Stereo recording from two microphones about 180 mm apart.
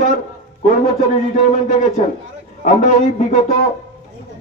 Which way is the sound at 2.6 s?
45° left (ahead or behind).